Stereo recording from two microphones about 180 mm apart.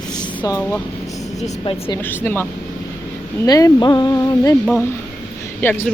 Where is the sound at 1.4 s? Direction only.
30° left (ahead or behind).